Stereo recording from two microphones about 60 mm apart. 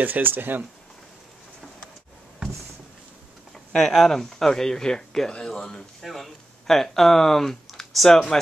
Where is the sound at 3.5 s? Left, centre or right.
Centre.